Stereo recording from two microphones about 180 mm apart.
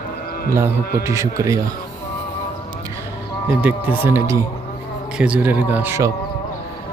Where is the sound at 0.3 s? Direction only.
55° left (ahead or behind).